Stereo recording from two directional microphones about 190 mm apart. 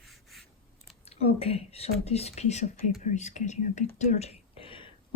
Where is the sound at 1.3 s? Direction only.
30° left (ahead or behind).